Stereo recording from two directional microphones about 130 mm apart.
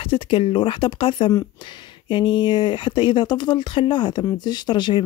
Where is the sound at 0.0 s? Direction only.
45° left (ahead or behind).